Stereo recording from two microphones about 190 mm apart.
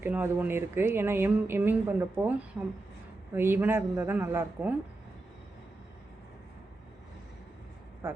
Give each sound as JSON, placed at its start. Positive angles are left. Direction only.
{"t": 0.0, "sound": "speech", "side_deg": -10}
{"t": 8.0, "sound": "speech", "side_deg": -10}